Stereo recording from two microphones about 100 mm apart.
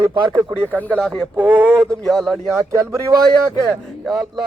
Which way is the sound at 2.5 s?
30° right (ahead or behind).